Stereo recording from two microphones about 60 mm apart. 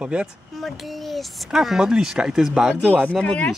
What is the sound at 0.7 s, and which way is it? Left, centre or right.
Speech, centre.